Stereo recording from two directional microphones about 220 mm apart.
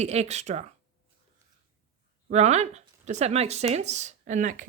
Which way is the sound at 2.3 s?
30° right (ahead or behind).